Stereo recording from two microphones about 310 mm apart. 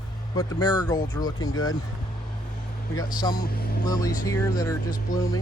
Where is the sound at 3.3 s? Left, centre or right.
Left.